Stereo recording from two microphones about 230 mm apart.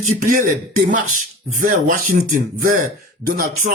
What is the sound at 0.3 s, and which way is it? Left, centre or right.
Speech, right.